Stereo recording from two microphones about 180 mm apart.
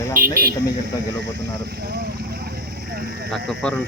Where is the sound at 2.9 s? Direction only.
55° right (ahead or behind).